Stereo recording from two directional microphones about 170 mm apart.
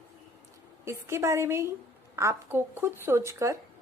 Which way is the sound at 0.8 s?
15° right (ahead or behind).